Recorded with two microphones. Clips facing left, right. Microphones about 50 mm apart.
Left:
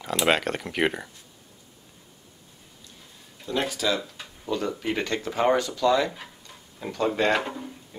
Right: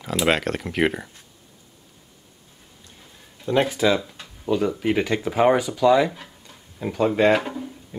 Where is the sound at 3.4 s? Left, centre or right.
Right.